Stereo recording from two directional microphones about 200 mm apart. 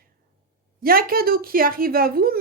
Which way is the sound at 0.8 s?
45° right (ahead or behind).